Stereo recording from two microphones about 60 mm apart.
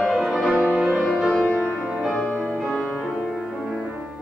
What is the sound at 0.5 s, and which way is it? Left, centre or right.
Music, right.